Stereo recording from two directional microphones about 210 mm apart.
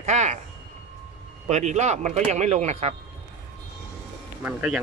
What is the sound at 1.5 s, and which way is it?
Speech, 35° right (ahead or behind).